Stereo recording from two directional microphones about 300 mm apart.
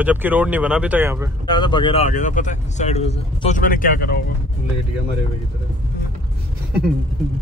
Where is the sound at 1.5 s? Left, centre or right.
Centre.